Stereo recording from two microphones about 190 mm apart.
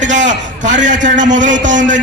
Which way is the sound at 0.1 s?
40° right (ahead or behind).